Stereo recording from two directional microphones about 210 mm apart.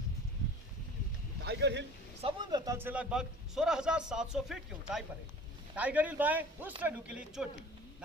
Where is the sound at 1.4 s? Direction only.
55° right (ahead or behind).